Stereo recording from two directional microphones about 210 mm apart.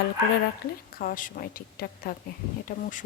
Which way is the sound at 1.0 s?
40° left (ahead or behind).